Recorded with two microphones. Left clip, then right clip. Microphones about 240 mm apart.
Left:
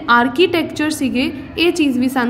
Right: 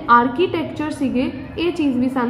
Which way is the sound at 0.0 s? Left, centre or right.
Left.